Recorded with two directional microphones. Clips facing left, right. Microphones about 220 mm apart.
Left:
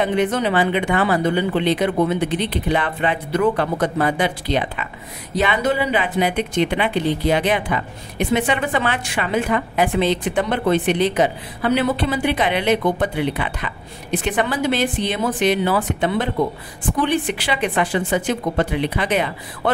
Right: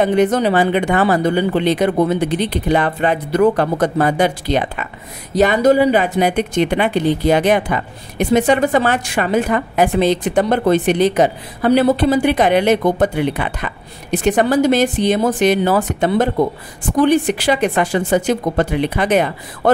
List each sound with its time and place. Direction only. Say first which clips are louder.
0.0 s a woman's voice: right 5 dB; 40° right (ahead or behind)